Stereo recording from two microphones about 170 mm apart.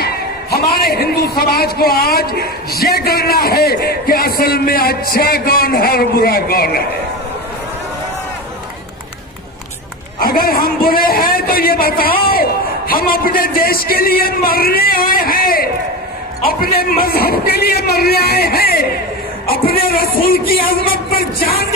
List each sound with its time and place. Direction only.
0.0 s a man's voice: 65° left (ahead or behind)
10.2 s a man's voice: 60° left (ahead or behind)